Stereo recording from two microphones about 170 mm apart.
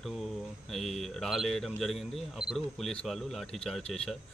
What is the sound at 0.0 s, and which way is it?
Speech, centre (ahead or behind).